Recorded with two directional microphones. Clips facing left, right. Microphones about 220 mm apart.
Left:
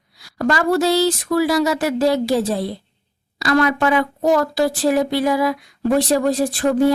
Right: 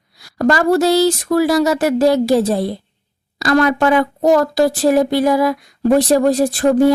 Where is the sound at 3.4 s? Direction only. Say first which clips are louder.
Right 3 dB; 40° right (ahead or behind).